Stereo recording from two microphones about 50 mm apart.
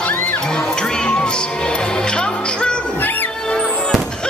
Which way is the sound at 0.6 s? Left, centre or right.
Centre.